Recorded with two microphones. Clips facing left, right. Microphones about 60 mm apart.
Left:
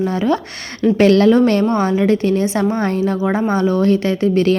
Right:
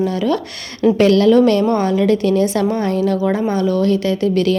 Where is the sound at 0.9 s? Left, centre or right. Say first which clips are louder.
Left 1 dB; left.